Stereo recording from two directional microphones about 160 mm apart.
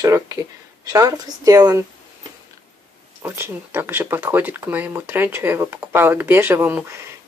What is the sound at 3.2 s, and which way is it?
Speech, 15° right (ahead or behind).